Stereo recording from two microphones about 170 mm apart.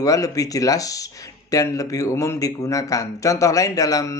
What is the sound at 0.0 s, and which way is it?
Speech, 20° left (ahead or behind).